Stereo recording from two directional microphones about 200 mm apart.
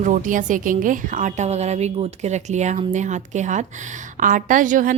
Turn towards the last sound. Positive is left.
turn(degrees=-40)  # may be behind; listen again after turning